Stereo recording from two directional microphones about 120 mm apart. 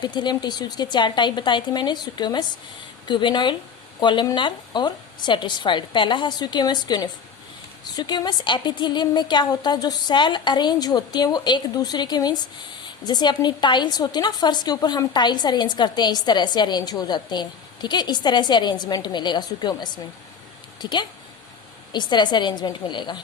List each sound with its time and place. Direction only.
0.0 s a woman's voice: 35° left (ahead or behind)